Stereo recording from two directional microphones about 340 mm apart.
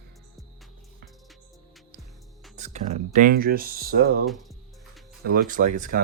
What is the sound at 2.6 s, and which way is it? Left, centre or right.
Speech, centre.